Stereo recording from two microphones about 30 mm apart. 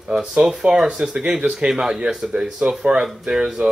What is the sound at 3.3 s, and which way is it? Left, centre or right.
Speech, right.